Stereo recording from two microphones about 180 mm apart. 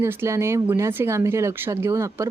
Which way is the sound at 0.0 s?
15° right (ahead or behind).